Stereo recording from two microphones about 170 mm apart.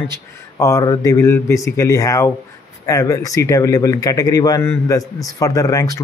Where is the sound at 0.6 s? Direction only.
20° left (ahead or behind).